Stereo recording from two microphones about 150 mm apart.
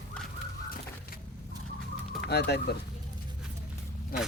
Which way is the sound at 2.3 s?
90° left.